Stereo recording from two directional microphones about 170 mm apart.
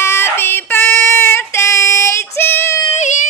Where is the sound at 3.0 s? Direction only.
45° left (ahead or behind).